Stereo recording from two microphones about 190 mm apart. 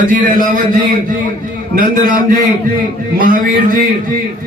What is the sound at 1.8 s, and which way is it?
A man's voice, 50° right (ahead or behind).